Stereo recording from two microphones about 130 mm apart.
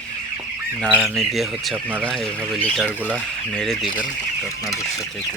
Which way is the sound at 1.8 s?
15° right (ahead or behind).